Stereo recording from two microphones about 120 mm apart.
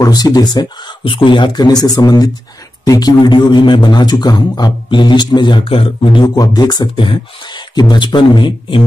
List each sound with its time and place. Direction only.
0.0 s a man's voice: 35° left (ahead or behind)
6.2 s a man's voice: 30° left (ahead or behind)